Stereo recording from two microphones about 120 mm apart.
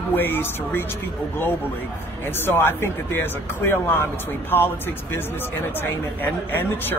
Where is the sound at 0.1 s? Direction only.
15° left (ahead or behind).